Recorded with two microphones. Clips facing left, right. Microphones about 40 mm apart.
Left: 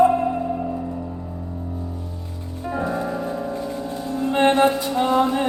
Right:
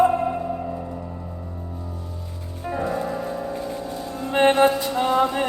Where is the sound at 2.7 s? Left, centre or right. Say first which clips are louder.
Left 1 dB; centre.